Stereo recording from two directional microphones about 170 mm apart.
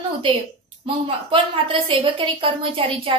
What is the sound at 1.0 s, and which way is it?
A woman's voice, 30° right (ahead or behind).